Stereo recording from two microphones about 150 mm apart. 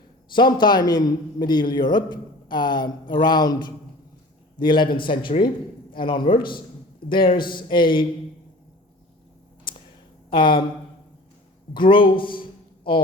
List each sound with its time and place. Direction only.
0.3 s a man's voice: 30° left (ahead or behind)
9.7 s a sound: 35° left (ahead or behind)
10.2 s speech: 30° left (ahead or behind)
11.7 s speech: 35° left (ahead or behind)